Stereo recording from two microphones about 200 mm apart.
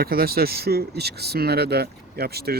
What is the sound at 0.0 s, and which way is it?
Speech, 50° right (ahead or behind).